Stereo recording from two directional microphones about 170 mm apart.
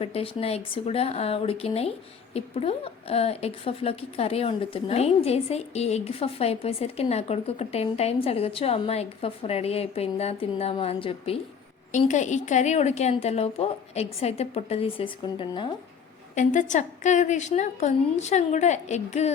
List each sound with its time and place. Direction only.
0.0 s speech: 35° left (ahead or behind)
11.9 s speech: 45° left (ahead or behind); by 15.7 s 30° left (ahead or behind)
16.3 s a woman's voice: 45° left (ahead or behind)